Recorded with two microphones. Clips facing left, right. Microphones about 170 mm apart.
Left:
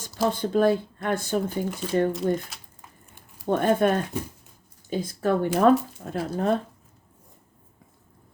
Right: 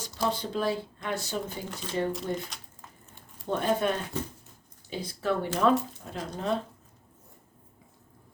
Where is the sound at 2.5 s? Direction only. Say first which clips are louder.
Even; 5° left (ahead or behind).